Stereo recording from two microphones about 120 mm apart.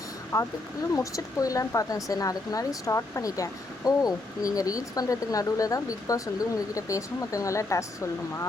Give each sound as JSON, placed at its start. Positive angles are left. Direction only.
{"t": 0.3, "sound": "speech", "side_deg": 30}